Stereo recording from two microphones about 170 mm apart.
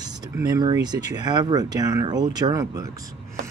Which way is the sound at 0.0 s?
25° right (ahead or behind).